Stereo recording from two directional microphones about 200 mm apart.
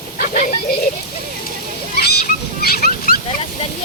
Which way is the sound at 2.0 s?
55° left (ahead or behind).